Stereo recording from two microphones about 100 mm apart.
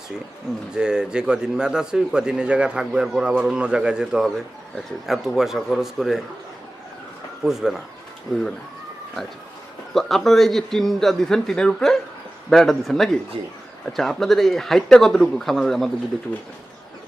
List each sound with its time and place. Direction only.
0.7 s a man's voice: 10° right (ahead or behind)
7.4 s a man's voice: 5° right (ahead or behind)
9.9 s a man's voice: centre (ahead or behind)
13.3 s speech: 65° right (ahead or behind)
13.9 s a man's voice: 5° left (ahead or behind)